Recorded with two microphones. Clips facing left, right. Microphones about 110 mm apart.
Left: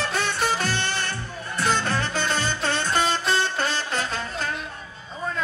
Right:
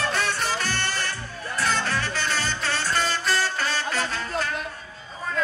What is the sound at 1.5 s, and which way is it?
Music, 25° left (ahead or behind).